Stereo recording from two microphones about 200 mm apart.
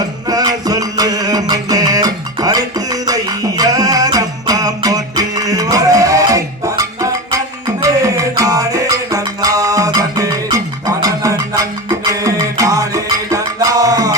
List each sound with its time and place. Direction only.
0.3 s music: 20° right (ahead or behind)